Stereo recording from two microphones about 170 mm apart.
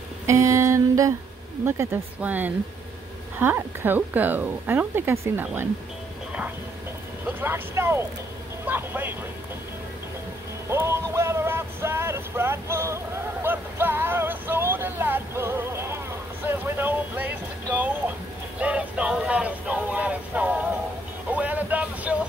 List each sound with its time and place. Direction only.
0.3 s a sound: 15° right (ahead or behind)
1.7 s speech: 15° right (ahead or behind)
7.2 s speech: 10° right (ahead or behind)
10.7 s vehicle: 15° right (ahead or behind)
16.4 s a sound: 10° right (ahead or behind)
18.6 s vehicle: 10° right (ahead or behind)
21.3 s music: 10° right (ahead or behind)